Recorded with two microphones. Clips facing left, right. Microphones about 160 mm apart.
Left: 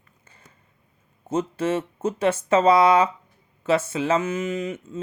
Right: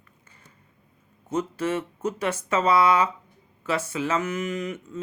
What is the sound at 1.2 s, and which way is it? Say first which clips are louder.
Speech: left 3 dB; 25° left (ahead or behind).